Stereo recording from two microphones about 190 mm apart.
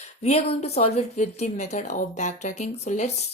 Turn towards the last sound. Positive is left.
turn(degrees=35)  # may be behind; listen again after turning